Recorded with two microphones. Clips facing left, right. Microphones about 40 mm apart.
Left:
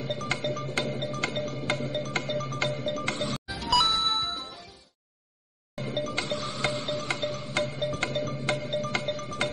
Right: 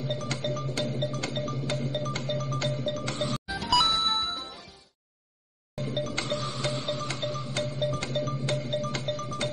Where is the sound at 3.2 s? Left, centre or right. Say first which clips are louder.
Right 1 dB; centre.